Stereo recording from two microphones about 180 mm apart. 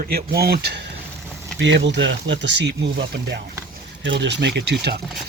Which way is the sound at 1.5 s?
80° right.